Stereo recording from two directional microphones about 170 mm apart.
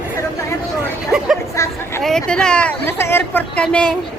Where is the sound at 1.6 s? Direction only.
15° left (ahead or behind).